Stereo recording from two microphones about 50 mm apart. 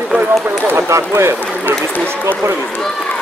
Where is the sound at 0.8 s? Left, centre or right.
Right.